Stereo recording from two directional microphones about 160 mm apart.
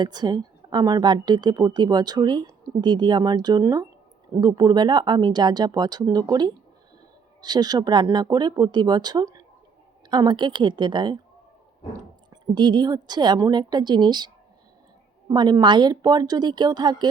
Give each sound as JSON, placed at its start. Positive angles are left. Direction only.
{"t": 0.0, "sound": "a woman's voice", "side_deg": -25}
{"t": 12.3, "sound": "a woman's voice", "side_deg": -25}
{"t": 15.3, "sound": "a woman's voice", "side_deg": -25}